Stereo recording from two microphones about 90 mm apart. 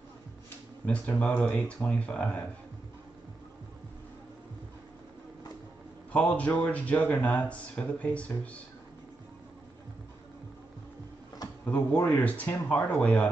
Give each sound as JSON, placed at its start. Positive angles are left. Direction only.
{"t": 0.8, "sound": "speech", "side_deg": 15}
{"t": 6.1, "sound": "speech", "side_deg": 15}
{"t": 11.6, "sound": "speech", "side_deg": 20}